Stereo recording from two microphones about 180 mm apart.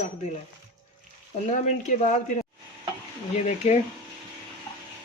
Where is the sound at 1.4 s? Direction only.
40° left (ahead or behind).